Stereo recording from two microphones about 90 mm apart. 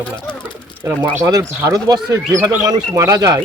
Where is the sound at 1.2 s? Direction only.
40° right (ahead or behind).